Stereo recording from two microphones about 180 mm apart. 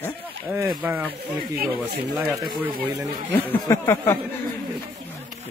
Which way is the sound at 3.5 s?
15° left (ahead or behind).